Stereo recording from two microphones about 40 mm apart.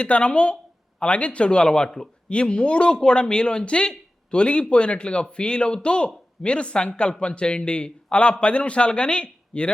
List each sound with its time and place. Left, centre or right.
0.0 s speech: left